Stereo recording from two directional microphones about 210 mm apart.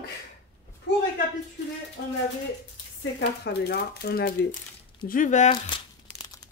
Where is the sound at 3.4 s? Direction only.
50° left (ahead or behind).